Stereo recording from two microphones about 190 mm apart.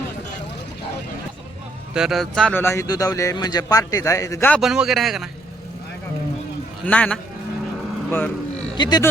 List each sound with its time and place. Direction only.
1.9 s a man's voice: centre (ahead or behind)
4.6 s a man's voice: centre (ahead or behind)
6.8 s a man's voice: 5° left (ahead or behind)
8.8 s speech: 20° left (ahead or behind)